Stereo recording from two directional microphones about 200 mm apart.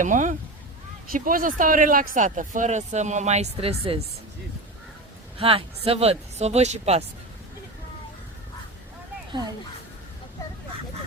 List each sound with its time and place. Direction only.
0.0 s speech: 40° right (ahead or behind)
5.4 s speech: 30° right (ahead or behind)